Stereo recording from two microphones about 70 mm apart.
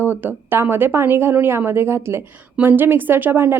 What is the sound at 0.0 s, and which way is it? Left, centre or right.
A woman's voice, right.